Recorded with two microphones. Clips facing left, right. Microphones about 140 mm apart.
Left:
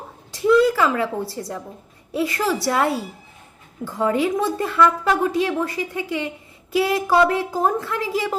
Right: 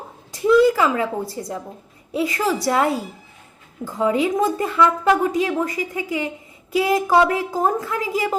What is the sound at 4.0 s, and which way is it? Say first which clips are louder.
A woman's voice: right 1 dB; 15° right (ahead or behind).